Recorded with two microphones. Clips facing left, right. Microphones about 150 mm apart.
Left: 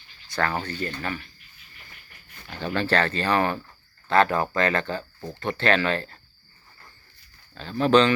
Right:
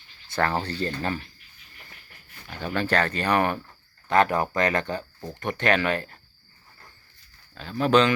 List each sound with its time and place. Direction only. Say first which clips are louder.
0.3 s speech: right 1 dB; 25° right (ahead or behind)
2.5 s speech: left 1 dB; 10° right (ahead or behind)
7.5 s speech: left 1 dB; 5° right (ahead or behind)